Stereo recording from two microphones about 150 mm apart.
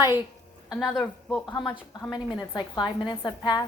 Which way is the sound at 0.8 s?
Centre (ahead or behind).